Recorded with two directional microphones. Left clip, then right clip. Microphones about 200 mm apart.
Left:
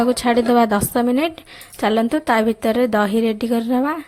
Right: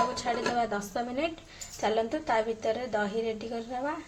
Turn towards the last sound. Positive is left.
turn(degrees=45)  # may be behind; listen again after turning